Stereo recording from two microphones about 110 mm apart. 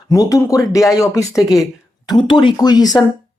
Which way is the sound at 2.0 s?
45° left (ahead or behind).